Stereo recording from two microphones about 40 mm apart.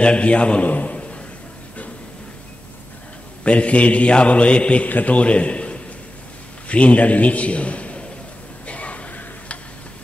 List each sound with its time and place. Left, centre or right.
0.0 s a man's voice: left
3.4 s a man's voice: left
4.8 s a man's voice: left
5.1 s a man's voice: left
8.6 s a sound: left